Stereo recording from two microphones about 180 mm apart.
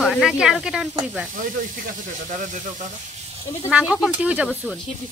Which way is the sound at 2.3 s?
45° right (ahead or behind).